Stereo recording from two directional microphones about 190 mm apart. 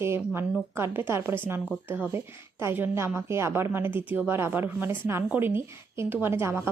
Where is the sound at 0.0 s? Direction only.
15° right (ahead or behind).